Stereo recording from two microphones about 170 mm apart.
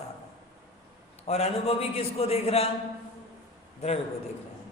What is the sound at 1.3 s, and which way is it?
A man's voice, 35° left (ahead or behind).